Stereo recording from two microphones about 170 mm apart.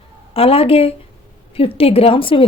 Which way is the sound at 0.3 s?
35° left (ahead or behind).